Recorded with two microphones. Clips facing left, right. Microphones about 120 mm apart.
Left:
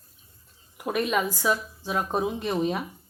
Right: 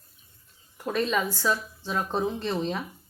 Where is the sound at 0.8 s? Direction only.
15° left (ahead or behind).